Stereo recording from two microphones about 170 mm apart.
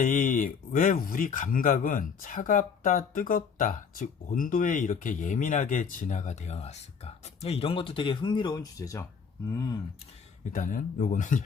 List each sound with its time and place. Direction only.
0.0 s a man's voice: 50° left (ahead or behind); by 9.8 s 20° left (ahead or behind)
10.4 s a man's voice: 50° left (ahead or behind)